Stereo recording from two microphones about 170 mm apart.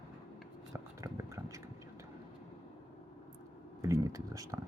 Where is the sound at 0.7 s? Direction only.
15° right (ahead or behind).